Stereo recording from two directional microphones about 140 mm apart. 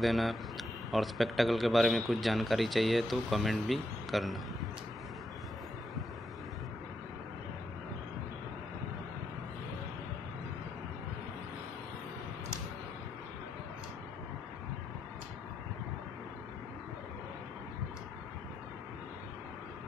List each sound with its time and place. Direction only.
0.0 s speech: centre (ahead or behind)